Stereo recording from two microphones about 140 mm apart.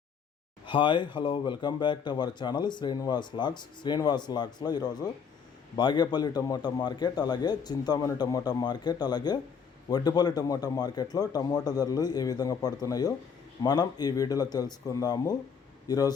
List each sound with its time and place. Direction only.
0.6 s a man's voice: 35° left (ahead or behind)